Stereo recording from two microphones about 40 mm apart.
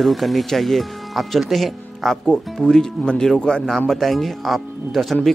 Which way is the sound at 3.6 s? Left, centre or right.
Centre.